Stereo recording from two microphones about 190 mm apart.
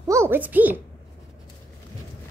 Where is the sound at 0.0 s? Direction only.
15° right (ahead or behind).